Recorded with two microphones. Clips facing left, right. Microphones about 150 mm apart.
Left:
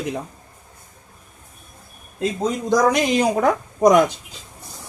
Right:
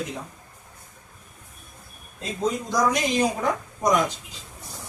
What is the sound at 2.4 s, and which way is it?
Speech, 75° left (ahead or behind).